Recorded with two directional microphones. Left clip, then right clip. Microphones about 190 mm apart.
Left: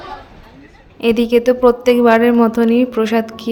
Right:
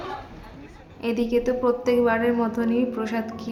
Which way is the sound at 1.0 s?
45° left (ahead or behind).